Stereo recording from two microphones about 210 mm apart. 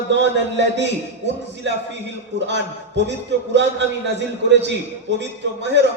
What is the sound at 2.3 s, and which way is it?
Speech, 55° right (ahead or behind).